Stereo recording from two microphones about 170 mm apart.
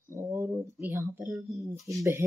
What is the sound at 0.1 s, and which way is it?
Speech, 15° right (ahead or behind).